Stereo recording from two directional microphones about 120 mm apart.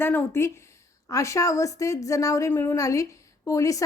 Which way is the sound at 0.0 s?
15° left (ahead or behind).